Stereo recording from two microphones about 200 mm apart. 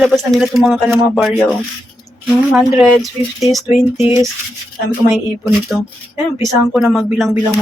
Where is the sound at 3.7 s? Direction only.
30° left (ahead or behind).